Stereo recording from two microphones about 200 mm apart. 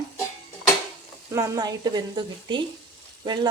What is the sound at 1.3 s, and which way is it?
Speech, 15° right (ahead or behind).